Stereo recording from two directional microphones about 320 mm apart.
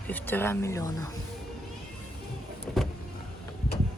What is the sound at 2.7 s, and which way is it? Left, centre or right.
Vehicle, centre.